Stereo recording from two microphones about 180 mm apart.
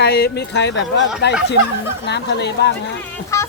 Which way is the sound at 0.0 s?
60° left (ahead or behind).